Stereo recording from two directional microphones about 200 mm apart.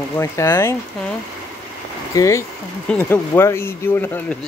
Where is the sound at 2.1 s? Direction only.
15° left (ahead or behind).